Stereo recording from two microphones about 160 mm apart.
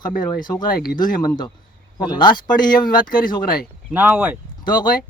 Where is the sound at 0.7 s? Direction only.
65° left (ahead or behind).